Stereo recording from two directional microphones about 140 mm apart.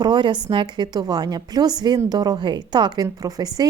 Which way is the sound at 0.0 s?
35° right (ahead or behind).